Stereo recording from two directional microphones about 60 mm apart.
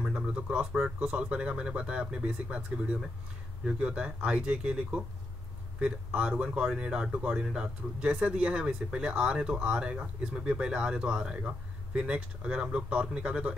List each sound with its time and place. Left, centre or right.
0.0 s speech: centre